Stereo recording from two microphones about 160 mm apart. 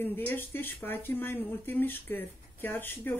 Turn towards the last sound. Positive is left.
turn(degrees=10)  # may be behind; listen again after turning